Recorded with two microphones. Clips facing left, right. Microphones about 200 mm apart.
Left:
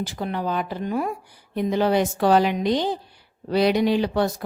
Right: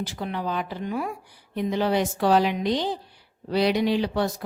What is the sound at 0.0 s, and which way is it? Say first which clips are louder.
Speech: left 3 dB; 45° left (ahead or behind).